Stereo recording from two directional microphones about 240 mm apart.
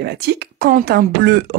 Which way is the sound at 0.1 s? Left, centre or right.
Right.